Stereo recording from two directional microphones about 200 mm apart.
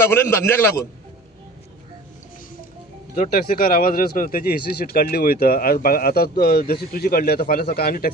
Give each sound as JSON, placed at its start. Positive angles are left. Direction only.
{"t": 0.0, "sound": "a man's voice", "side_deg": 15}
{"t": 3.2, "sound": "speech", "side_deg": 45}